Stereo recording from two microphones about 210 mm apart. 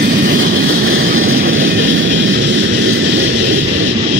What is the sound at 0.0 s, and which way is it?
Vehicle, 60° right (ahead or behind).